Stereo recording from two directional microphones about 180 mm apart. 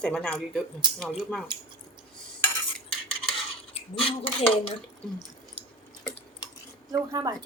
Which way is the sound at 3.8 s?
30° left (ahead or behind).